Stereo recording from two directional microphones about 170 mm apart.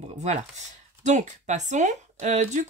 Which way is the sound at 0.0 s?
40° right (ahead or behind).